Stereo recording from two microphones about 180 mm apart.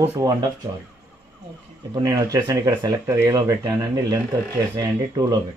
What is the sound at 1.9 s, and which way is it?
Speech, 20° right (ahead or behind).